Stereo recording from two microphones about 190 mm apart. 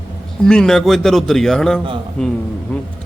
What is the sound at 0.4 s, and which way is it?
A man's voice, 5° left (ahead or behind).